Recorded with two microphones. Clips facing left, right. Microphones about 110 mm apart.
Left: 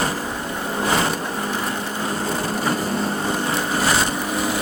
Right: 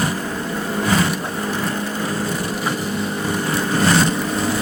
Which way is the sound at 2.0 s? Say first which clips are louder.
Left 2 dB; 25° left (ahead or behind).